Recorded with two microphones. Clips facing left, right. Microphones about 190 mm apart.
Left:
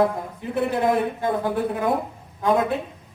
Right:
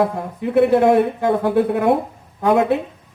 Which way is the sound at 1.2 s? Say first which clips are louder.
Right 6 dB; 65° right (ahead or behind).